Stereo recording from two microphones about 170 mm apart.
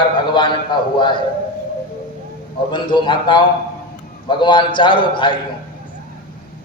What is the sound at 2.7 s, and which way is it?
A man's voice, 30° left (ahead or behind).